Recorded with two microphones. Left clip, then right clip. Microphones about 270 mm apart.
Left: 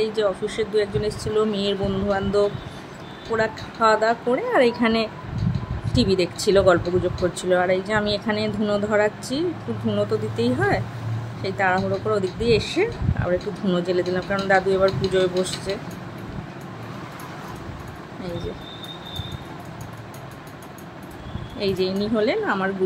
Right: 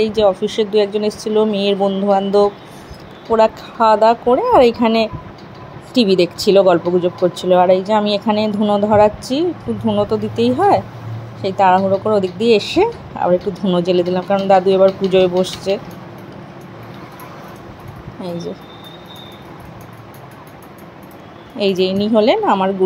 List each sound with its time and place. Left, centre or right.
0.0 s speech: centre
21.5 s speech: centre